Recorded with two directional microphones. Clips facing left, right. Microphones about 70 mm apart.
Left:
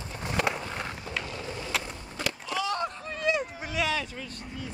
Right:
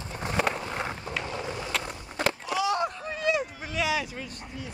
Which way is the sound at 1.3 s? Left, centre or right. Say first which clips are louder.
Right 3 dB; right.